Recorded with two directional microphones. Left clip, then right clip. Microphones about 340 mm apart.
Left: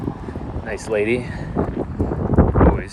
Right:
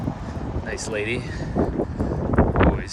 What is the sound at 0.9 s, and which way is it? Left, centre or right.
Speech, centre.